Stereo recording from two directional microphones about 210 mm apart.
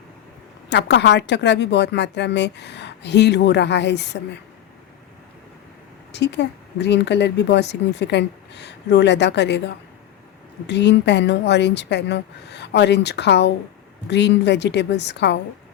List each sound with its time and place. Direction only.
0.7 s speech: 55° left (ahead or behind)
6.1 s speech: 55° left (ahead or behind)